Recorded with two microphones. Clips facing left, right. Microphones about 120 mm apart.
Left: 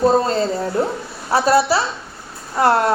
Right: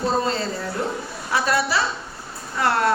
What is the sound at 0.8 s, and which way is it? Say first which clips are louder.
A woman's voice: left 5 dB; 35° left (ahead or behind).